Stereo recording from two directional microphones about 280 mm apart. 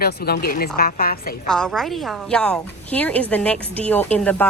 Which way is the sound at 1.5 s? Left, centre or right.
Centre.